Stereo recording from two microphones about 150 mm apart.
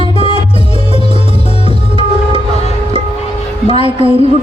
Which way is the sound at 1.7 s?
35° right (ahead or behind).